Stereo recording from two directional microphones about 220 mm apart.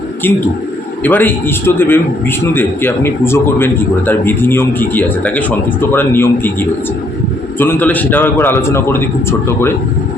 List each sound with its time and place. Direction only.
1.0 s a man's voice: 10° left (ahead or behind)